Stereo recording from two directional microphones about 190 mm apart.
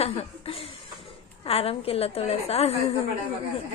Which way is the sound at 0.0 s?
30° left (ahead or behind).